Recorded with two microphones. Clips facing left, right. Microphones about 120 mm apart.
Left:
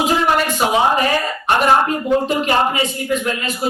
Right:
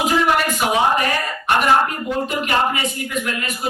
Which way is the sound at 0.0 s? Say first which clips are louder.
Left 1 dB; 30° left (ahead or behind).